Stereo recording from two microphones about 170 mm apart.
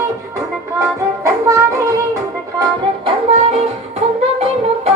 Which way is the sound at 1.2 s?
20° right (ahead or behind).